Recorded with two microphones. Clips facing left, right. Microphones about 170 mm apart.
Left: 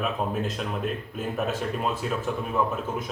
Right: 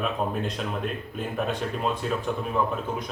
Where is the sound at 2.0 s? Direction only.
5° left (ahead or behind).